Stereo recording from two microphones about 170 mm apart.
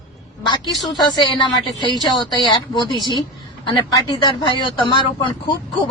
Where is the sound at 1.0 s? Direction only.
25° left (ahead or behind).